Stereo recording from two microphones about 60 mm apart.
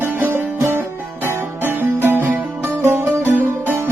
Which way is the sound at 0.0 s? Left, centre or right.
Right.